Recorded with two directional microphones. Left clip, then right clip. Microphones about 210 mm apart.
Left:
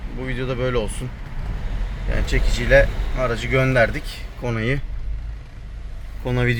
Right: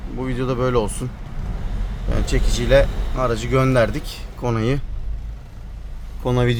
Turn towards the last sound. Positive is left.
turn(degrees=-25)  # may be behind; listen again after turning